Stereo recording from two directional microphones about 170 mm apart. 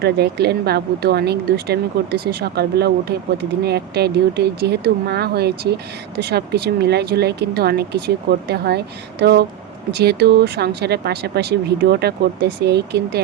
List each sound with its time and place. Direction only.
0.0 s speech: 75° right (ahead or behind)